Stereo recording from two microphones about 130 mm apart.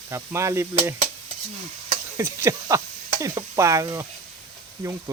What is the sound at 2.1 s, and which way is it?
Speech, 20° right (ahead or behind).